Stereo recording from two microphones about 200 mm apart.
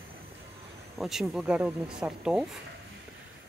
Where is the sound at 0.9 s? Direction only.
Centre (ahead or behind).